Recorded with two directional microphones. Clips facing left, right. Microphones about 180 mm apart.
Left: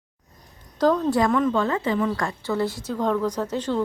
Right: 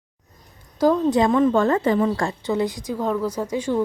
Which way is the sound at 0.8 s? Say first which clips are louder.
Right 2 dB; 10° right (ahead or behind).